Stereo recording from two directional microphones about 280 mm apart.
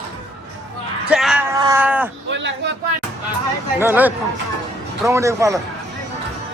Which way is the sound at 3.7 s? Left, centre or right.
Centre.